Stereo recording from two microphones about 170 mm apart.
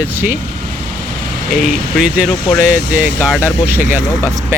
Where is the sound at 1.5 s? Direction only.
Centre (ahead or behind).